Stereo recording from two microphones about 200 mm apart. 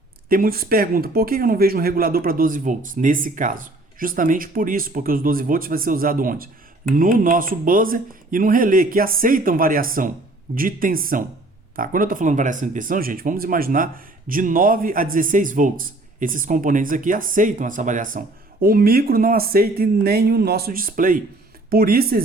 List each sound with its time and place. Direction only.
0.3 s speech: 45° right (ahead or behind)